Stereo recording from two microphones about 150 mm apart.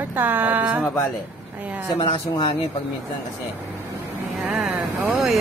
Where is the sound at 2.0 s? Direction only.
30° left (ahead or behind).